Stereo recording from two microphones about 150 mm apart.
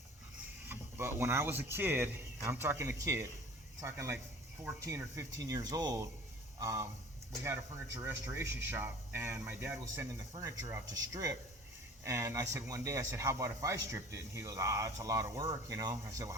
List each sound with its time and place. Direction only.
0.7 s speech: 15° right (ahead or behind)